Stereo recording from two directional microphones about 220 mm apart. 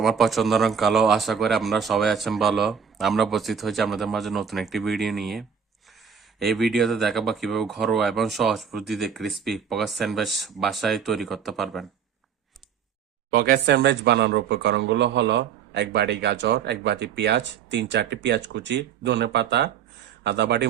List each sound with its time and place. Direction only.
0.0 s a man's voice: centre (ahead or behind)
13.3 s speech: 45° right (ahead or behind)